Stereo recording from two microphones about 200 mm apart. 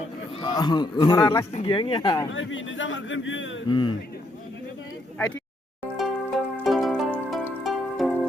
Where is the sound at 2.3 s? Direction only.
70° left (ahead or behind).